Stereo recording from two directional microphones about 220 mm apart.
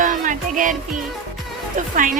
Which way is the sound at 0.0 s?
35° right (ahead or behind).